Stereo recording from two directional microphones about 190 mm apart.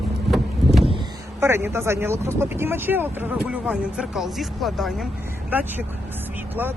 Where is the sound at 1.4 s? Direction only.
15° right (ahead or behind).